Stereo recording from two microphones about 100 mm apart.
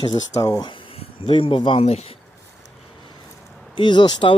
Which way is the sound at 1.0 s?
60° left (ahead or behind).